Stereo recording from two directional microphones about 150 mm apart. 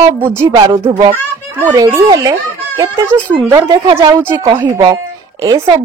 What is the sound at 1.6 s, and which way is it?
Speech, 20° right (ahead or behind).